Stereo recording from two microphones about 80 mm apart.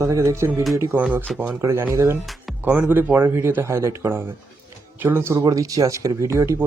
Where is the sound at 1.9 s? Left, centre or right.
Right.